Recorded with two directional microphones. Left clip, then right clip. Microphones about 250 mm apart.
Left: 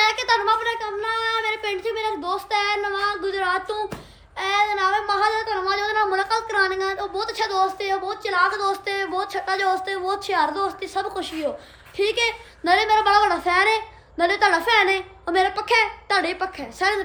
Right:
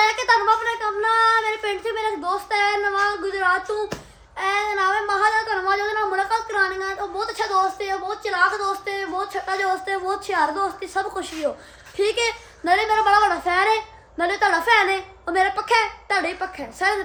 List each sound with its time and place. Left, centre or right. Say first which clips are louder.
0.0 s female singing: right 2 dB; centre
4.4 s a sound: left 1 dB; centre
8.9 s a woman's voice: left 1 dB; centre